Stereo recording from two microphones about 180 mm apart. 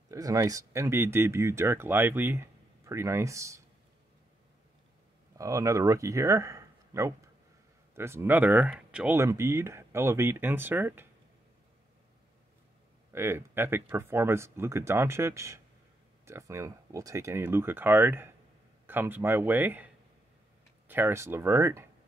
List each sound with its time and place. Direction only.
0.1 s speech: 20° right (ahead or behind)
5.4 s speech: 15° right (ahead or behind)
13.1 s speech: 15° right (ahead or behind)
20.9 s speech: 15° right (ahead or behind)